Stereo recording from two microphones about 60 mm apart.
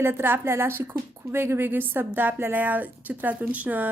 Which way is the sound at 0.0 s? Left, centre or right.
Right.